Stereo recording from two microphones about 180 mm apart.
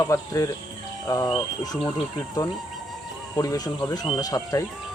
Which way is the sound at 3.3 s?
20° left (ahead or behind).